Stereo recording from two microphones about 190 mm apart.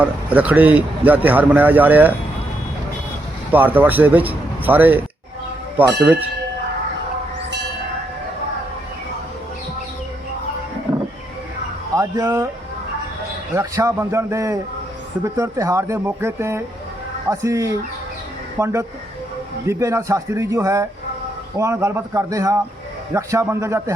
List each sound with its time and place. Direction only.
0.0 s speech: 5° right (ahead or behind)
3.5 s speech: 10° right (ahead or behind)
10.9 s a sound: 5° right (ahead or behind)
11.9 s speech: 15° right (ahead or behind)
13.5 s speech: 15° right (ahead or behind)